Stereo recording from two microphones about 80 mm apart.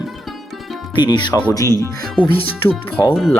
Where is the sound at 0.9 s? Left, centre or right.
Left.